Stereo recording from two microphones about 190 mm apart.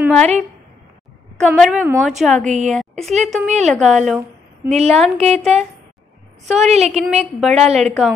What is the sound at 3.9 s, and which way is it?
Speech, centre (ahead or behind).